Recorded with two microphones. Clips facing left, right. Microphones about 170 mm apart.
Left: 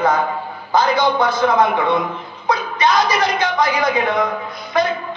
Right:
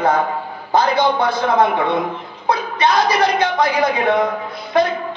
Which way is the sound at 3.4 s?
60° right (ahead or behind).